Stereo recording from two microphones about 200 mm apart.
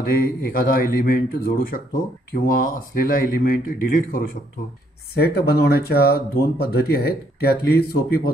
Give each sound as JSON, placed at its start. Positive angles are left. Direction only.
{"t": 0.0, "sound": "a man's voice", "side_deg": 45}